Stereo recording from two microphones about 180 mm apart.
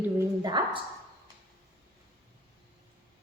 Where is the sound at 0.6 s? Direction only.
25° right (ahead or behind).